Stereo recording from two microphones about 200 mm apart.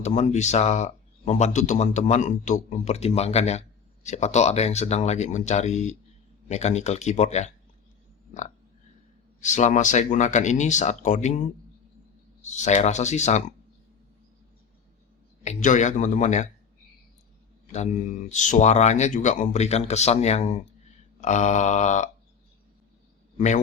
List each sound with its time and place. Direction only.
0.0 s speech: 35° left (ahead or behind)
8.3 s a sound: 40° left (ahead or behind)
9.4 s speech: 35° left (ahead or behind)
15.4 s speech: 35° left (ahead or behind)
17.7 s speech: 35° left (ahead or behind)